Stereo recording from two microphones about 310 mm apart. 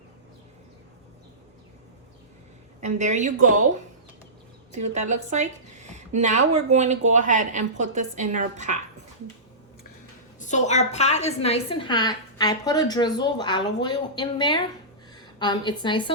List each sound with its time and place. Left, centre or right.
2.8 s speech: right
4.7 s a woman's voice: right
5.3 s a sound: right
6.1 s speech: right
10.4 s a woman's voice: left